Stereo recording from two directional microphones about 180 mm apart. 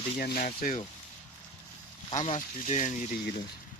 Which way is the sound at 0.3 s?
45° left (ahead or behind).